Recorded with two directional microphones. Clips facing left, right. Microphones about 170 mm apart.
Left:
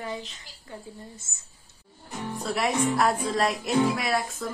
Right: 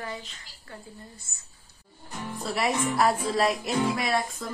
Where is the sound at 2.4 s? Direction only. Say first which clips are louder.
Left 1 dB; centre (ahead or behind).